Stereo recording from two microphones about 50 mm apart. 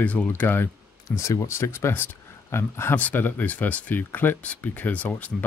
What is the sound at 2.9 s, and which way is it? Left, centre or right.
Speech, left.